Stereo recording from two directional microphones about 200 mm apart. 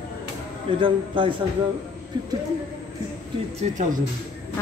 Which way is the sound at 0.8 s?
25° right (ahead or behind).